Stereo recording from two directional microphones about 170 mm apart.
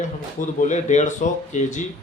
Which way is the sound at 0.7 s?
45° left (ahead or behind).